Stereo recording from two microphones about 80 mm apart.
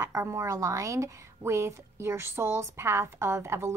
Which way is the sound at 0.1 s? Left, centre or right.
Right.